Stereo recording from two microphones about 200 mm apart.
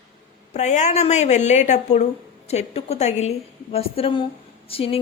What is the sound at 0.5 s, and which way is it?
A woman's voice, 35° left (ahead or behind).